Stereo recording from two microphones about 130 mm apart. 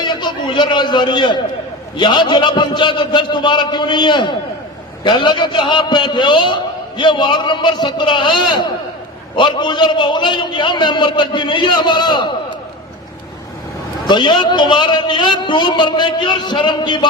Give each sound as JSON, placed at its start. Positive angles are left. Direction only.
{"t": 0.0, "sound": "a man's voice", "side_deg": 35}
{"t": 14.1, "sound": "a man's voice", "side_deg": 35}